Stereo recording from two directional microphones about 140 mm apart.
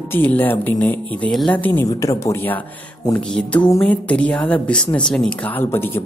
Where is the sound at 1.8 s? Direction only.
25° left (ahead or behind).